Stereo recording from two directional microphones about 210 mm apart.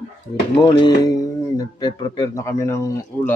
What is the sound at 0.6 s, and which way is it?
Speech, 20° left (ahead or behind).